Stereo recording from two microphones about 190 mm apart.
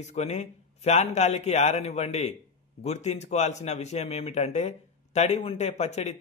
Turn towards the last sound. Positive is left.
turn(degrees=35)  # may be behind; listen again after turning